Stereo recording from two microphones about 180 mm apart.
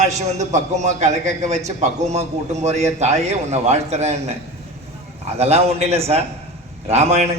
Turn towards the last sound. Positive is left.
turn(degrees=-35)  # may be behind; listen again after turning